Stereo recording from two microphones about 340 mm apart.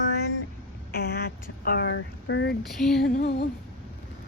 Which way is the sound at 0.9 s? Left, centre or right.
Left.